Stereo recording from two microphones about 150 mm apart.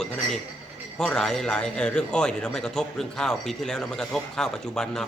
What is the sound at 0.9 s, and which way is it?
A man's voice, 5° left (ahead or behind).